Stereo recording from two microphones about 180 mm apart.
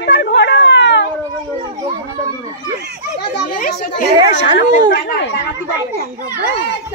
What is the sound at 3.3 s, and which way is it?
Children playing, 60° left (ahead or behind).